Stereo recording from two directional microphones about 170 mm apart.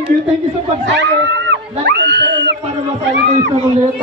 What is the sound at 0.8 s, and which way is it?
Speech, 90° right.